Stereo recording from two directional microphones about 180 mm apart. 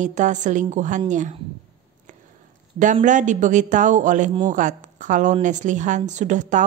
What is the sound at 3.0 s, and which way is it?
A woman's voice, 45° right (ahead or behind).